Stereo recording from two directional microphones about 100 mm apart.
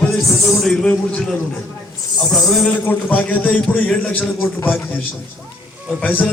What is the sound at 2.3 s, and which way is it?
Speech, 5° left (ahead or behind).